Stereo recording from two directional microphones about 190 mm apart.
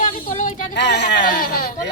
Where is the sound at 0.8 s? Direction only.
65° left (ahead or behind).